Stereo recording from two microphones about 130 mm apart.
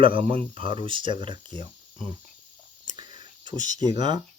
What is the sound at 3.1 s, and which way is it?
Whispering, 35° right (ahead or behind).